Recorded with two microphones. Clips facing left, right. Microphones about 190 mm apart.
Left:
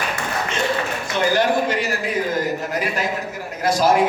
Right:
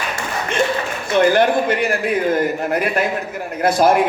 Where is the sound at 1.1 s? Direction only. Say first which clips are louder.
Right 5 dB; 55° right (ahead or behind).